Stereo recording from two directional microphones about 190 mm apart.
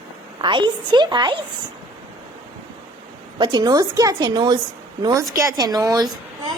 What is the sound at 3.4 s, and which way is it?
A woman's voice, 20° right (ahead or behind).